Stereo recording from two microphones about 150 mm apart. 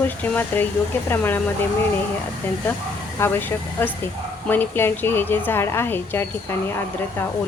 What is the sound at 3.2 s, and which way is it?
A woman's voice, 15° left (ahead or behind).